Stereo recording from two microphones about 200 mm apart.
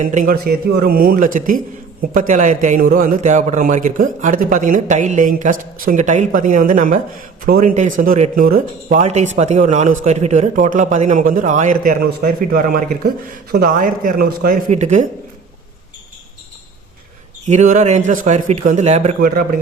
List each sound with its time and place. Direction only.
0.0 s a man's voice: 40° right (ahead or behind)
17.4 s a man's voice: 35° right (ahead or behind)